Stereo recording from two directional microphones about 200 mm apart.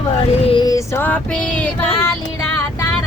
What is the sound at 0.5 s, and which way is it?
Female singing, 20° left (ahead or behind).